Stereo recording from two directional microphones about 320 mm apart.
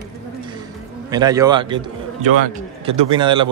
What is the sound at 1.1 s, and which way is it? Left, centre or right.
Speech, centre.